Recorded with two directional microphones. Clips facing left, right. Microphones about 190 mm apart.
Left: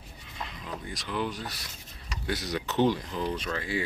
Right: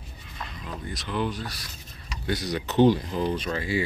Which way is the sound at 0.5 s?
10° left (ahead or behind).